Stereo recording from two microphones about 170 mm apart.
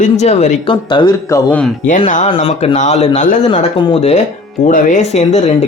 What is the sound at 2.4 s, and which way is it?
Speech, 40° left (ahead or behind).